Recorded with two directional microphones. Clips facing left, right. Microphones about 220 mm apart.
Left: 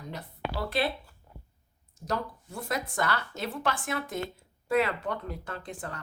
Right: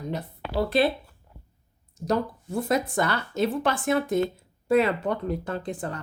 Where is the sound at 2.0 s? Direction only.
25° right (ahead or behind).